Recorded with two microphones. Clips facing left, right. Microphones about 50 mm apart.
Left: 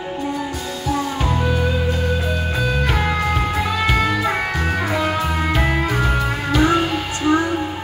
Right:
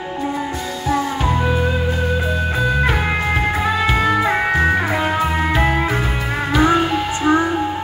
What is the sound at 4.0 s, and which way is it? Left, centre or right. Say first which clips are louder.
Music: right 3 dB; right.